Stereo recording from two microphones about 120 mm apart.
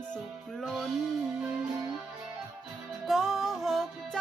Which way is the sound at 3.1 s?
Centre (ahead or behind).